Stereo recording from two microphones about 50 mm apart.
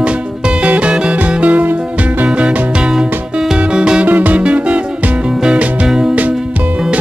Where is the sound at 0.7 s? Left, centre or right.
Right.